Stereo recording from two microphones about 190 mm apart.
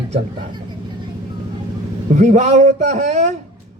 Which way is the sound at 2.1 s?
40° right (ahead or behind).